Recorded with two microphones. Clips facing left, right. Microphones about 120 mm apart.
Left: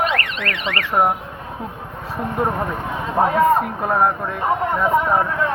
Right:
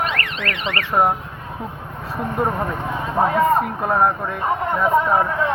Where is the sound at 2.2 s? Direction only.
Centre (ahead or behind).